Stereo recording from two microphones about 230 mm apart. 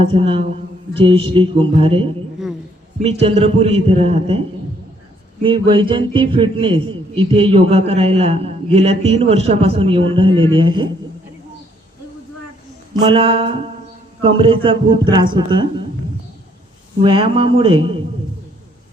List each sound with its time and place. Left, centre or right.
0.0 s a man's voice: right
12.9 s a man's voice: right
17.0 s a man's voice: right